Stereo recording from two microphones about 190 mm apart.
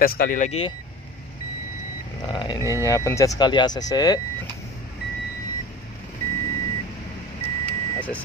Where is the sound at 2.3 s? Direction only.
20° left (ahead or behind).